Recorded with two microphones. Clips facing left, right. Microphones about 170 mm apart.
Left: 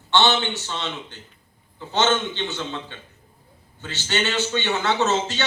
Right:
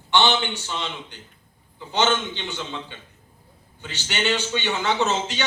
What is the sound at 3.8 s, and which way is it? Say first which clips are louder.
A man's voice: left 3 dB; 15° right (ahead or behind).